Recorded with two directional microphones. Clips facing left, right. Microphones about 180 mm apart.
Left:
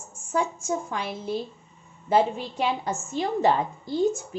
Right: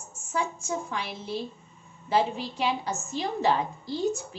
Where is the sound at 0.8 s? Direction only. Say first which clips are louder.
Left 4 dB; 50° left (ahead or behind).